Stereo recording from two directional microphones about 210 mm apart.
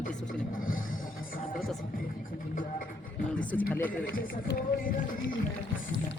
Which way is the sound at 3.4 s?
5° left (ahead or behind).